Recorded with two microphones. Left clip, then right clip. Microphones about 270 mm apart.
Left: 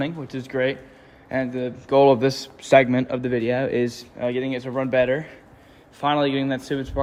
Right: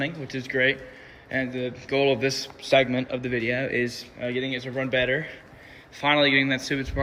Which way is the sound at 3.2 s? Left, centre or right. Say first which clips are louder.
Left 4 dB; left.